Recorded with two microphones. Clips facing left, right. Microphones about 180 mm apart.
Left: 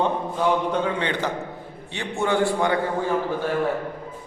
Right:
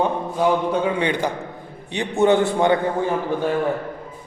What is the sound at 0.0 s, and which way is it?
A man's voice, 10° right (ahead or behind).